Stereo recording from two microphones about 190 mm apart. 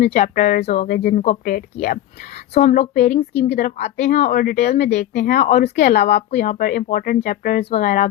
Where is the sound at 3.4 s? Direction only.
50° left (ahead or behind).